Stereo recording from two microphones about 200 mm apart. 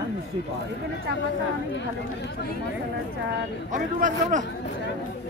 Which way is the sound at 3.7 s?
40° right (ahead or behind).